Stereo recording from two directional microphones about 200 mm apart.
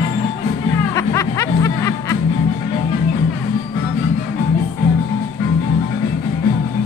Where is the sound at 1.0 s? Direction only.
15° left (ahead or behind).